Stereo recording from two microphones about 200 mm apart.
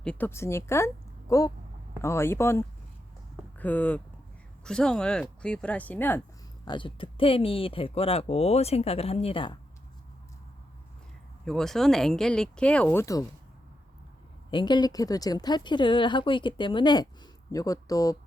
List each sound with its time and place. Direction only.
0.0 s a woman's voice: 5° left (ahead or behind)
6.7 s speech: 25° left (ahead or behind)
11.4 s speech: centre (ahead or behind)
14.5 s a woman's voice: 20° left (ahead or behind)